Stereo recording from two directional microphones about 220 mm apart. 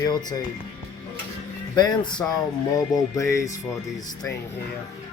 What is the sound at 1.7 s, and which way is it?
Speech, 20° left (ahead or behind).